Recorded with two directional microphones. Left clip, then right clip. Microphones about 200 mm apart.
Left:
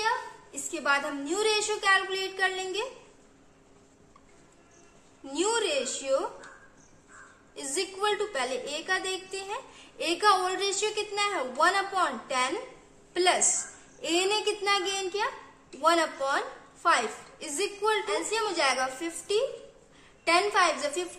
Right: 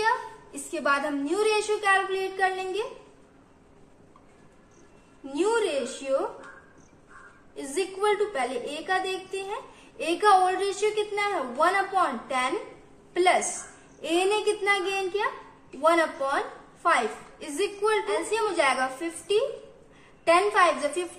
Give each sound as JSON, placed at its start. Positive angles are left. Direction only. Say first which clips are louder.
{"t": 0.0, "sound": "a child's voice", "louder": "right 3 dB", "side_deg": 5}
{"t": 5.2, "sound": "speech", "louder": "right 3 dB", "side_deg": 25}
{"t": 7.5, "sound": "a woman's voice", "louder": "right 3 dB", "side_deg": 25}